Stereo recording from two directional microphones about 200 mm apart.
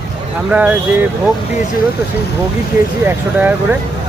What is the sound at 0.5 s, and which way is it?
Speech, 10° right (ahead or behind).